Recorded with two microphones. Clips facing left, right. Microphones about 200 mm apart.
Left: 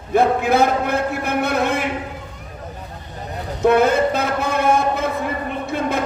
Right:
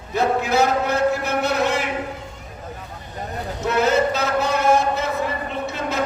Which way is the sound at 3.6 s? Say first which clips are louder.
Left 4 dB; 55° left (ahead or behind).